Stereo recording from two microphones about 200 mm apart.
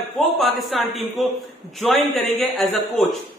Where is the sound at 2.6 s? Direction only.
Centre (ahead or behind).